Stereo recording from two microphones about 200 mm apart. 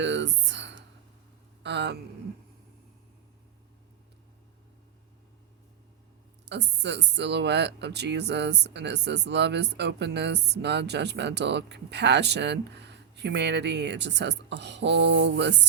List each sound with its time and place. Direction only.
0.0 s a sound: 60° right (ahead or behind)
1.6 s speech: 60° right (ahead or behind)
6.5 s speech: 60° right (ahead or behind)